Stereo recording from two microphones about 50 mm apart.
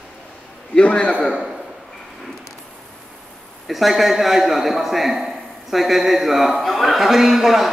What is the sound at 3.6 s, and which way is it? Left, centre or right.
A man's voice, centre.